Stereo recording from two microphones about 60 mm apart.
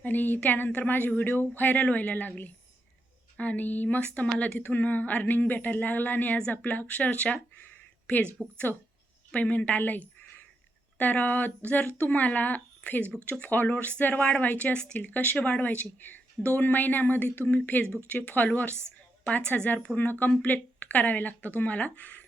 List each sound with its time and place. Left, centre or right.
0.0 s a woman's voice: left
9.4 s a woman's voice: left
14.9 s a woman's voice: left